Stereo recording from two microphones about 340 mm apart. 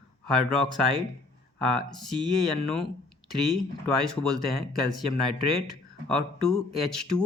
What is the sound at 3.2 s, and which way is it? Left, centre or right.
Speech, right.